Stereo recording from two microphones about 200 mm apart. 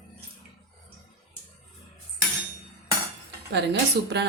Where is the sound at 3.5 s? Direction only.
60° right (ahead or behind).